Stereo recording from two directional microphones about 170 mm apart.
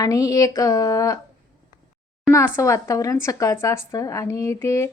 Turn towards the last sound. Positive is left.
turn(degrees=15)  # may be behind; listen again after turning